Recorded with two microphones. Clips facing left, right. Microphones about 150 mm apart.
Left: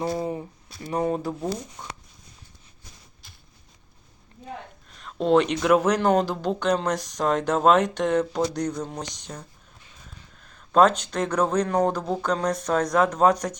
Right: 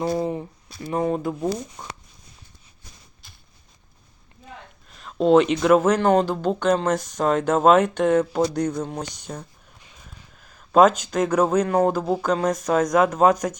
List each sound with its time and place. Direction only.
0.3 s speech: 25° right (ahead or behind)
1.3 s speech: 10° right (ahead or behind)
4.9 s speech: centre (ahead or behind)